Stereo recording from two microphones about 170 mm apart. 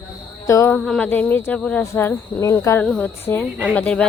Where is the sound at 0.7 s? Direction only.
5° left (ahead or behind).